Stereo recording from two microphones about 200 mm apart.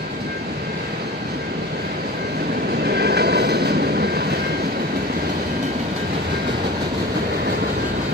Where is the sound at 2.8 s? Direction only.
55° right (ahead or behind).